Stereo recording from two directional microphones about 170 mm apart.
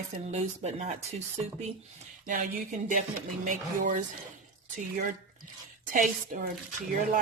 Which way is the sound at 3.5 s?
50° right (ahead or behind).